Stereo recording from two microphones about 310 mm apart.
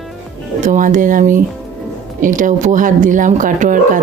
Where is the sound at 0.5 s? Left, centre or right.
Right.